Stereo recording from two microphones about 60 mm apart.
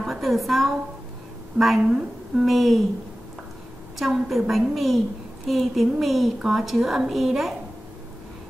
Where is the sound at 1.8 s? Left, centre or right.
Centre.